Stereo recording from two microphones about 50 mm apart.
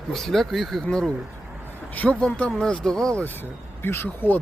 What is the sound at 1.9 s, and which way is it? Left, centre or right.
Speech, left.